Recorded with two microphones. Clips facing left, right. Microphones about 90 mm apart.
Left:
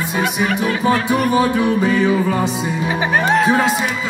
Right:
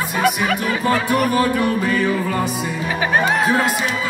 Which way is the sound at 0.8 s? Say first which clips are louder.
Left 1 dB; 10° left (ahead or behind).